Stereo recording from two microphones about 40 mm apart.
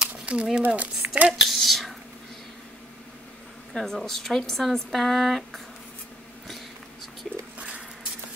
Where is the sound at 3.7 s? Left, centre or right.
Centre.